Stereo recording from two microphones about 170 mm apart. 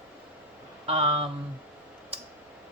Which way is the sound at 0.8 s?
35° right (ahead or behind).